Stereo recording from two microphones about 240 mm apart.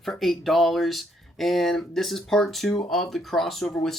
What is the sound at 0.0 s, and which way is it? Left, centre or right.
Speech, centre.